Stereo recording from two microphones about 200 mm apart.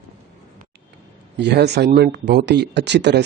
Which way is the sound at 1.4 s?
55° right (ahead or behind).